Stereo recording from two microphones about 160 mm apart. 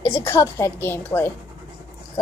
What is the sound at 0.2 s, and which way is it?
A woman's voice, 20° left (ahead or behind).